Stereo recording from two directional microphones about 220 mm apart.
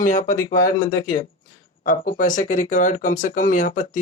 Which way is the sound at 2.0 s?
35° left (ahead or behind).